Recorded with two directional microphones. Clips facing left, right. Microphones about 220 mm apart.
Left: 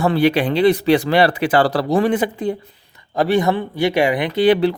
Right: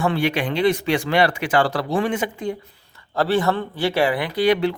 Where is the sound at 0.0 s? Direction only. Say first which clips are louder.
Left 5 dB; 35° left (ahead or behind).